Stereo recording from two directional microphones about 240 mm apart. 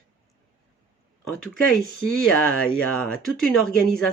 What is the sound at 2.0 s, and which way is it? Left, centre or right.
Speech, centre.